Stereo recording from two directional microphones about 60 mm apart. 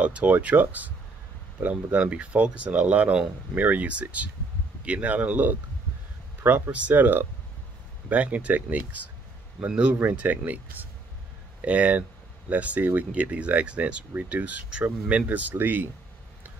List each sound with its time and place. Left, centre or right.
0.0 s speech: right
9.9 s speech: right